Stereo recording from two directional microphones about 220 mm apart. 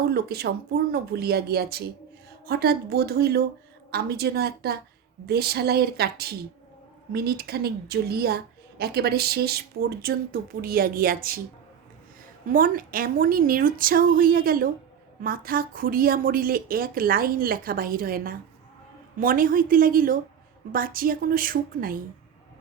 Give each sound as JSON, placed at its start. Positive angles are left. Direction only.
{"t": 0.1, "sound": "speech", "side_deg": -45}
{"t": 12.5, "sound": "a woman's voice", "side_deg": -40}